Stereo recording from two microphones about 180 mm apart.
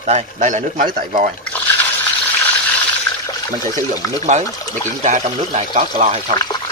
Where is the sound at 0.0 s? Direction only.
40° right (ahead or behind).